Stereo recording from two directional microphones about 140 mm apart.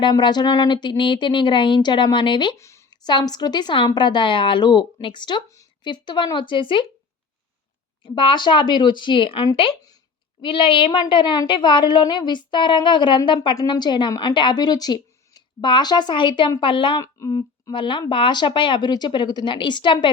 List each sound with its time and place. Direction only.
0.0 s a woman's voice: 30° left (ahead or behind)
2.6 s a sound: 20° left (ahead or behind)
3.1 s a woman's voice: 30° left (ahead or behind)
8.0 s a woman's voice: 35° left (ahead or behind)
17.0 s a woman's voice: 25° left (ahead or behind)